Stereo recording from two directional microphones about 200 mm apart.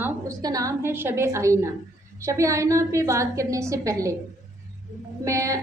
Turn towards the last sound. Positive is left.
turn(degrees=-15)  # may be behind; listen again after turning